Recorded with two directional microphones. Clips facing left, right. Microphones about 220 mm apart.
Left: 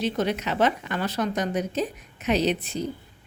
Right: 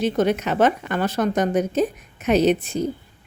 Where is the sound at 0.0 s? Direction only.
50° right (ahead or behind).